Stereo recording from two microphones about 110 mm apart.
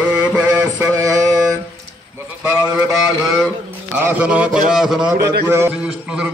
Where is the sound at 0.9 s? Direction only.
30° right (ahead or behind).